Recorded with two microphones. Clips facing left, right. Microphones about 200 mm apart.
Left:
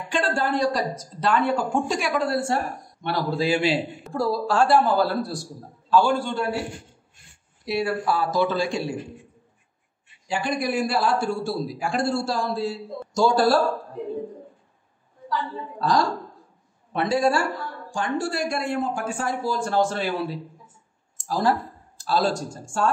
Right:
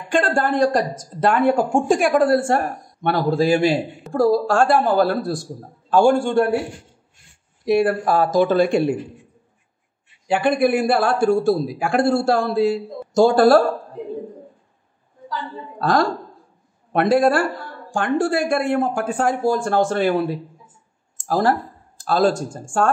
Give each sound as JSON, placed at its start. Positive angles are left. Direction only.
{"t": 0.1, "sound": "speech", "side_deg": -50}
{"t": 7.6, "sound": "speech", "side_deg": -50}
{"t": 10.2, "sound": "a man's voice", "side_deg": -60}
{"t": 15.8, "sound": "a man's voice", "side_deg": -55}